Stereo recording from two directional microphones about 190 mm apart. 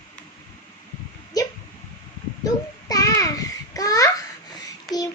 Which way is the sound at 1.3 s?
20° left (ahead or behind).